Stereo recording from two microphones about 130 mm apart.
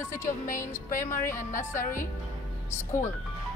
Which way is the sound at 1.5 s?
85° left.